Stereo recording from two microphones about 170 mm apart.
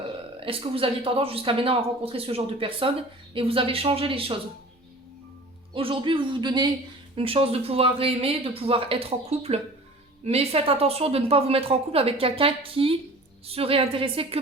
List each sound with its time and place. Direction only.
0.3 s speech: 35° right (ahead or behind)
5.7 s speech: 30° right (ahead or behind)